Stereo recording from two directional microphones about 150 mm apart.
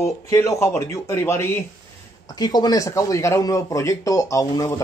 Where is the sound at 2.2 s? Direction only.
25° left (ahead or behind).